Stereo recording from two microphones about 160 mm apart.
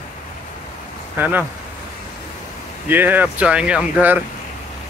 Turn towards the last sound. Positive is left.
turn(degrees=-10)  # may be behind; listen again after turning